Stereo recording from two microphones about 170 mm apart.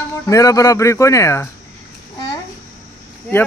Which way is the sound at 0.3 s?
20° left (ahead or behind).